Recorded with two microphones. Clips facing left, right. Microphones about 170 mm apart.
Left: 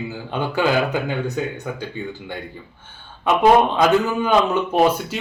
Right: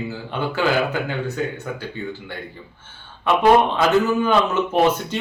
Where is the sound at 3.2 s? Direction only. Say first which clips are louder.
Left 1 dB; 15° left (ahead or behind).